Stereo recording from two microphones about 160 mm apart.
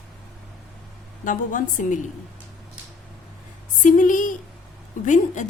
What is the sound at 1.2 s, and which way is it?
Speech, 55° left (ahead or behind).